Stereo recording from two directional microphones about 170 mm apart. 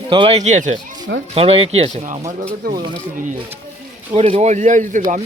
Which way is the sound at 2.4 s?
60° right (ahead or behind).